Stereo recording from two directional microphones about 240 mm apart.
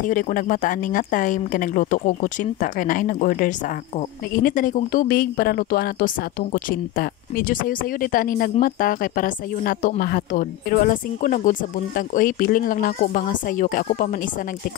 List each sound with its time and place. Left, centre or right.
0.0 s speech: left